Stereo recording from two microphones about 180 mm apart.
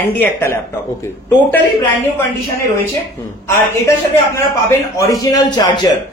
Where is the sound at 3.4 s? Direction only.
15° left (ahead or behind).